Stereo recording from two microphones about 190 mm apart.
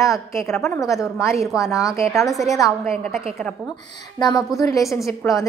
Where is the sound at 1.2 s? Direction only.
15° left (ahead or behind).